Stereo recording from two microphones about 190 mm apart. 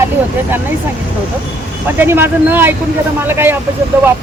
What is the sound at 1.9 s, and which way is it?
Speech, 10° right (ahead or behind).